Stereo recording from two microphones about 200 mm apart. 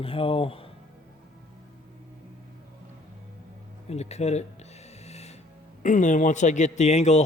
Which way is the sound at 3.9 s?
35° left (ahead or behind).